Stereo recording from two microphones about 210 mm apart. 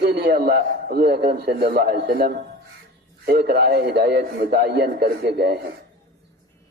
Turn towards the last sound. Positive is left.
turn(degrees=-50)  # may be behind; listen again after turning